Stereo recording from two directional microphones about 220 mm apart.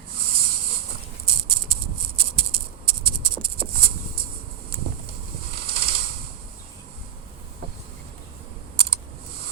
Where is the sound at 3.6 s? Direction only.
45° right (ahead or behind).